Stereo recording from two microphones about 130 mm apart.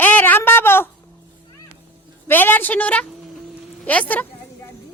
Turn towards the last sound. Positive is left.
turn(degrees=10)  # may be behind; listen again after turning